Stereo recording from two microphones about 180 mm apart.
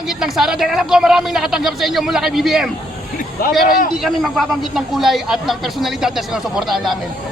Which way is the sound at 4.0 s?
Centre (ahead or behind).